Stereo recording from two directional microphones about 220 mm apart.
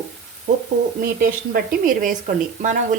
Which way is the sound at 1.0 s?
40° right (ahead or behind).